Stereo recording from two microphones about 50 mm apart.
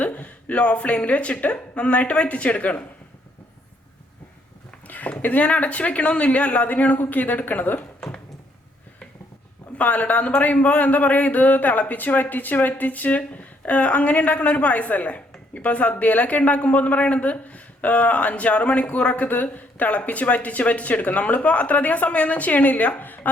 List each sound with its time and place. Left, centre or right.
0.0 s speech: left
4.9 s a man's voice: left
9.7 s a man's voice: left